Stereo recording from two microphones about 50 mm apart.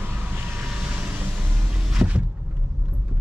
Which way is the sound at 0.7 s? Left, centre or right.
Centre.